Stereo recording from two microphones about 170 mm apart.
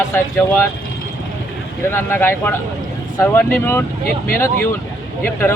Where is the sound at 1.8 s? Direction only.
15° left (ahead or behind).